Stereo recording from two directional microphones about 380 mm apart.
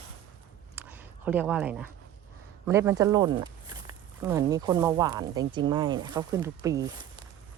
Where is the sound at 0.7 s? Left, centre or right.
Centre.